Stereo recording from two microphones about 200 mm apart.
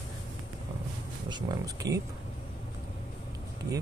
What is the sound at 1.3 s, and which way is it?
Speech, 20° right (ahead or behind).